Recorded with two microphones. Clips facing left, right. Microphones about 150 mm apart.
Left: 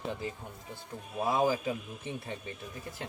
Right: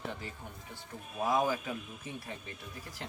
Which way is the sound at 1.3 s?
30° left (ahead or behind).